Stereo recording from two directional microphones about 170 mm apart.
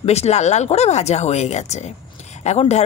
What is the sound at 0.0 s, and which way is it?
Speech, 40° left (ahead or behind).